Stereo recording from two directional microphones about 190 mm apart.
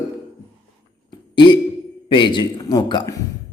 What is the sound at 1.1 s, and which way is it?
Hiccup, 25° left (ahead or behind).